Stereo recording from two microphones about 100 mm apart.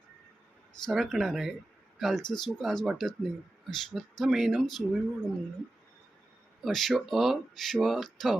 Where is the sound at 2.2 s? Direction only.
50° left (ahead or behind).